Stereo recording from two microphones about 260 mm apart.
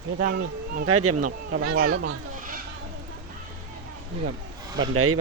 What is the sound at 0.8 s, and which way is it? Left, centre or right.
Speech, right.